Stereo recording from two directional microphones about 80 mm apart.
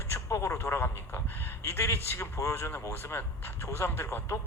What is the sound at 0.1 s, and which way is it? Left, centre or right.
A man's voice, left.